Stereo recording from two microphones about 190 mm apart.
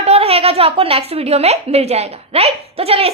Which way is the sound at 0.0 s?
30° right (ahead or behind).